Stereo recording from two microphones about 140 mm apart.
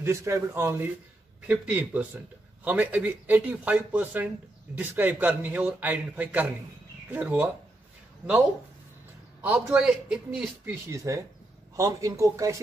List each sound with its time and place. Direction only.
0.0 s a man's voice: 20° right (ahead or behind)
9.4 s a man's voice: 10° right (ahead or behind)
10.9 s speech: 20° right (ahead or behind)